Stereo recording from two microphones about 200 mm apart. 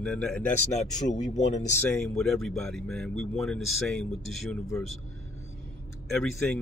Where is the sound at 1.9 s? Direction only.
Centre (ahead or behind).